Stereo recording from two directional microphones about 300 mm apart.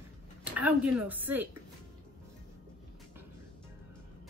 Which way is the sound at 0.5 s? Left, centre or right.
Centre.